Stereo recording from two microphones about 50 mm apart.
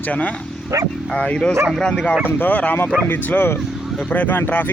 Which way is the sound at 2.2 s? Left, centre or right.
Left.